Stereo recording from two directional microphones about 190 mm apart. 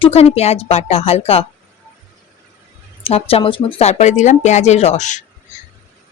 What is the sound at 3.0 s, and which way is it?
A woman's voice, 30° left (ahead or behind).